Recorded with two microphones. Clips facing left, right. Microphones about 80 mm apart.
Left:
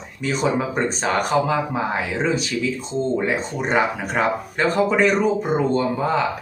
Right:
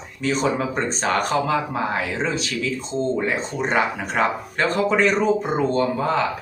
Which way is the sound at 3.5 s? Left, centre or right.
Centre.